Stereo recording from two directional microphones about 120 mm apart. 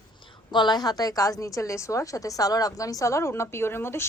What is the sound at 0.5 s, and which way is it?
A woman's voice, 35° left (ahead or behind).